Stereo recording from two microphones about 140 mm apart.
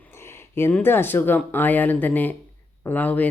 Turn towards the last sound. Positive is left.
turn(degrees=10)  # may be behind; listen again after turning